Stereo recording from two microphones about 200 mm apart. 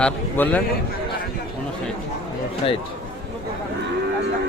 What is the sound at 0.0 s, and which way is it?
Speech, 10° left (ahead or behind).